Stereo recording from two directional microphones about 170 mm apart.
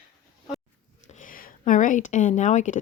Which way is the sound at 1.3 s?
50° left (ahead or behind).